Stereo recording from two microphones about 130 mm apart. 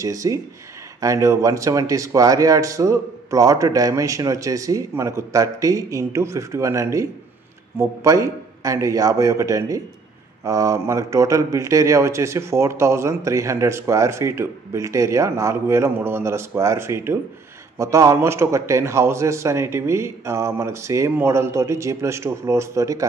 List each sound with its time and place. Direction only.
0.0 s a man's voice: 25° right (ahead or behind)